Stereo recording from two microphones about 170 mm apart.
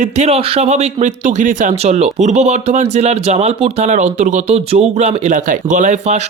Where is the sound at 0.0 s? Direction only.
40° right (ahead or behind).